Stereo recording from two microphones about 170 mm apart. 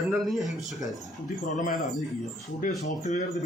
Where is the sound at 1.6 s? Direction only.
50° left (ahead or behind).